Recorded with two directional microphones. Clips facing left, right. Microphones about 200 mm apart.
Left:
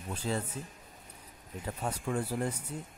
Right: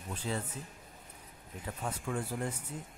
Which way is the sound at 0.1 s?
40° left (ahead or behind).